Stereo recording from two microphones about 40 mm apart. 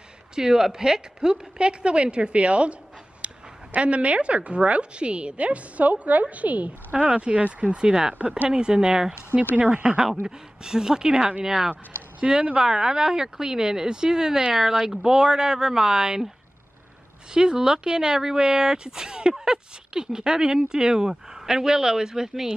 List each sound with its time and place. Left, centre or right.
0.4 s a woman's voice: centre
3.2 s a sound: right
3.7 s a woman's voice: right; by 9.1 s centre
9.6 s a woman's voice: right
9.9 s speech: centre
17.3 s speech: centre